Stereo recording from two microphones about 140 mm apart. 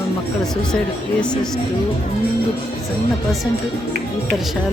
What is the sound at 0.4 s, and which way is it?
Speech, 5° left (ahead or behind).